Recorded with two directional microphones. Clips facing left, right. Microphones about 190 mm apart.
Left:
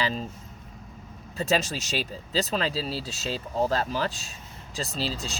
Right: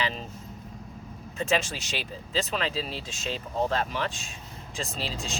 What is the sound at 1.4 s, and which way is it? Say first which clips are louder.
Speech: left 2 dB; 40° left (ahead or behind).